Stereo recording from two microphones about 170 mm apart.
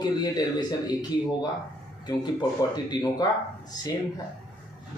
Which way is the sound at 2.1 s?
25° left (ahead or behind).